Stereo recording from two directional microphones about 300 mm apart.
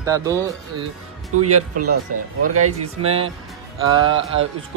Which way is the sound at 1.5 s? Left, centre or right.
Right.